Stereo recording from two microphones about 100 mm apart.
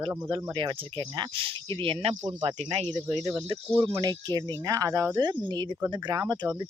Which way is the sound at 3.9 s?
40° right (ahead or behind).